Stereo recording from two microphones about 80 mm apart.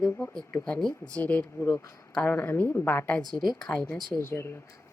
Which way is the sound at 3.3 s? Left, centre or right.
Centre.